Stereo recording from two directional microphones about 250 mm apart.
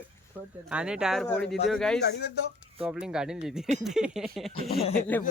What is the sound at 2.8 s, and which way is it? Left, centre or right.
A man's voice, centre.